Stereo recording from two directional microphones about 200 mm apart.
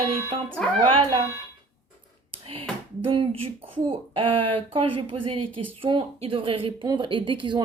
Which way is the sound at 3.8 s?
25° right (ahead or behind).